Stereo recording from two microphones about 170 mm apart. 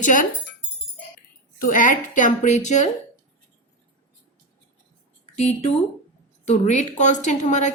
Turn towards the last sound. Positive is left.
turn(degrees=45)  # may be behind; listen again after turning